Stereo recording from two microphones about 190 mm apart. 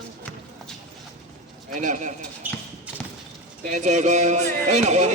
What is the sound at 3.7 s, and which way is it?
Speech, 40° right (ahead or behind).